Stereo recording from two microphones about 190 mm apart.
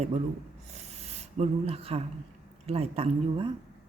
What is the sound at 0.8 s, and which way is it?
Filing, 35° right (ahead or behind).